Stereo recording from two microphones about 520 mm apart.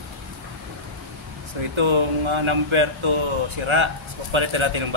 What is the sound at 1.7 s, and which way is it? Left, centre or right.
Speech, right.